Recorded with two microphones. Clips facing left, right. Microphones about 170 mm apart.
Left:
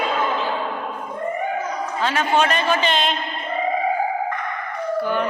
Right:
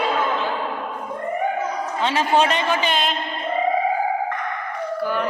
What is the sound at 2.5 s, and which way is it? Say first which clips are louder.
Speech: left 1 dB; 15° right (ahead or behind).